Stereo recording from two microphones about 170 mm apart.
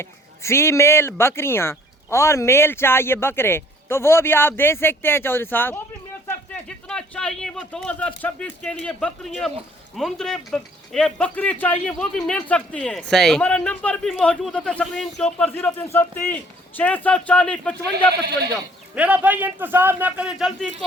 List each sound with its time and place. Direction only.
0.0 s speech: 15° left (ahead or behind)
18.1 s speech: 70° right (ahead or behind)
18.5 s speech: 10° right (ahead or behind)